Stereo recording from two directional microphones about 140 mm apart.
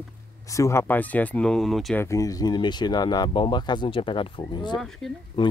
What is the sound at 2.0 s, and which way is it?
Speech, 20° left (ahead or behind).